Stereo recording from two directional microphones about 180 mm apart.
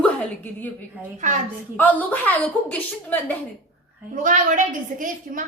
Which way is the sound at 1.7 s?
10° left (ahead or behind).